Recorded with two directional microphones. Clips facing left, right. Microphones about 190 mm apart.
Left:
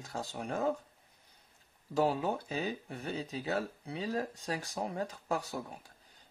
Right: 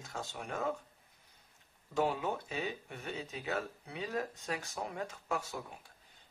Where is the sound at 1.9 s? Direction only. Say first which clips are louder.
Left 3 dB; 35° left (ahead or behind).